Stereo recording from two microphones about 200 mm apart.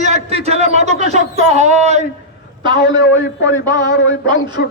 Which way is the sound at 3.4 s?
65° left (ahead or behind).